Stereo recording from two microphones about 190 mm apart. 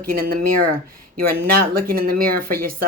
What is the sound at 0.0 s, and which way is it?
Speech, 50° right (ahead or behind).